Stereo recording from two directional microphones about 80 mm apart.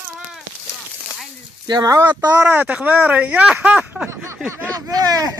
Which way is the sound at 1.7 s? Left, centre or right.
Right.